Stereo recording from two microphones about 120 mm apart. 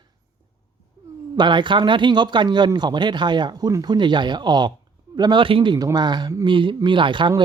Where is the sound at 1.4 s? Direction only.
40° right (ahead or behind).